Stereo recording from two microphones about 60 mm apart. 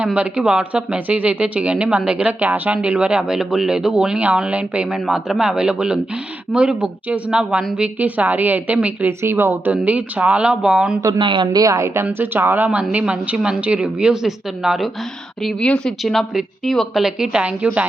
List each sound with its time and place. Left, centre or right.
0.0 s a woman's voice: centre
5.0 s a woman's voice: centre; by 9.0 s right
9.0 s a woman's voice: right
9.8 s a woman's voice: right
11.5 s speech: right
12.2 s a woman's voice: right; by 14.8 s centre
15.6 s speech: centre
16.3 s a woman's voice: centre